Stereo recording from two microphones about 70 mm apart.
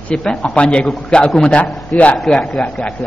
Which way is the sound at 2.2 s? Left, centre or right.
Centre.